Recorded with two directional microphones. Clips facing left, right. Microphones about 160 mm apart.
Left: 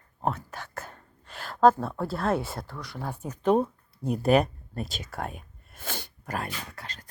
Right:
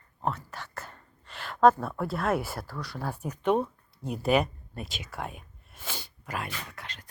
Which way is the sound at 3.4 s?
35° left (ahead or behind).